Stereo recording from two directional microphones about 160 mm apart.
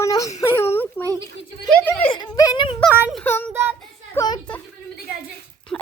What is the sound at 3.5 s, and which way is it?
Speech, 15° right (ahead or behind).